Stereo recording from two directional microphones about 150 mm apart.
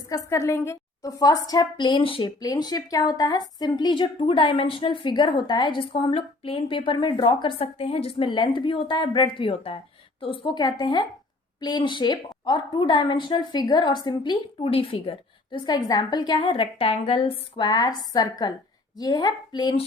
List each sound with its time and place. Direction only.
0.1 s a woman's voice: 20° left (ahead or behind)